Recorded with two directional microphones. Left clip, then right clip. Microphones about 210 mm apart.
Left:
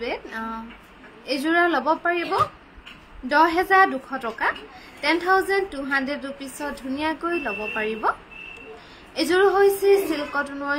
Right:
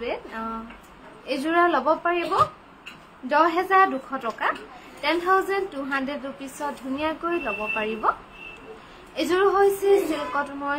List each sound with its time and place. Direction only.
0.0 s a sound: 15° left (ahead or behind)
1.2 s a woman's voice: 15° left (ahead or behind)
9.1 s a woman's voice: 15° left (ahead or behind)